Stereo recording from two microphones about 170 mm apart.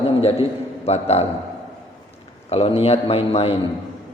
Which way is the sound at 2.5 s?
35° left (ahead or behind).